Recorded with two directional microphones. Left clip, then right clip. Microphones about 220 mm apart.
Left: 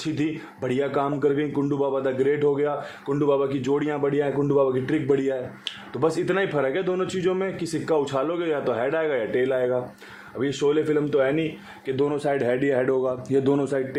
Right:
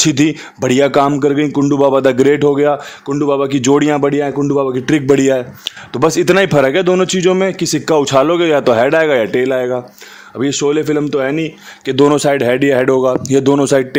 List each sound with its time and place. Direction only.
0.0 s speech: 50° right (ahead or behind)